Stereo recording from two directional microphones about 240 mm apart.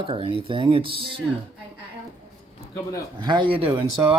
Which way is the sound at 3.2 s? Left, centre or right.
Centre.